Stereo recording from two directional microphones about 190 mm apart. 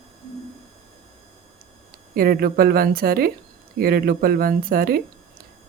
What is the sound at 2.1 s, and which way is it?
Speech, 50° right (ahead or behind).